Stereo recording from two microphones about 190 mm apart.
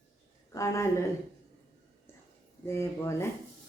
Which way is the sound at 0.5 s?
15° left (ahead or behind).